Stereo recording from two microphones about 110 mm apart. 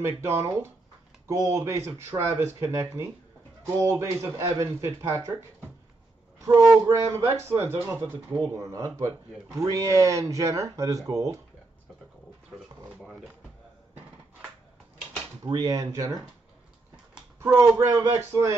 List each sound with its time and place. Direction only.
0.0 s speech: 25° right (ahead or behind)
6.4 s speech: 30° right (ahead or behind)
15.4 s speech: 35° right (ahead or behind)
17.4 s speech: 25° right (ahead or behind)